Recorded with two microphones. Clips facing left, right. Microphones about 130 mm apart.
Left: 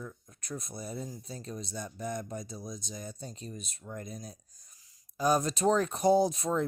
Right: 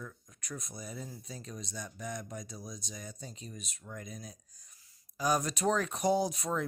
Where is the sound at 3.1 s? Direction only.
40° left (ahead or behind).